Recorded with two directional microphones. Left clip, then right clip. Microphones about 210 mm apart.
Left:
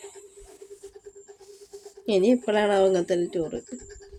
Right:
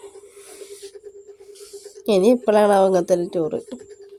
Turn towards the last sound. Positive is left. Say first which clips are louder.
# right 6 dB
turn(degrees=-25)  # may be behind; listen again after turning